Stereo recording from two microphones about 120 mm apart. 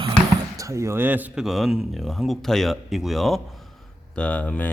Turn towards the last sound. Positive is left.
turn(degrees=10)  # may be behind; listen again after turning